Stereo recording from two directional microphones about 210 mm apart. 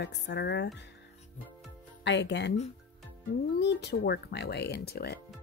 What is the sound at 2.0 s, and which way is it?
Speech, 55° left (ahead or behind).